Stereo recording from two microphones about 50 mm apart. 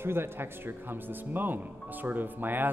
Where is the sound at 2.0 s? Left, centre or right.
Right.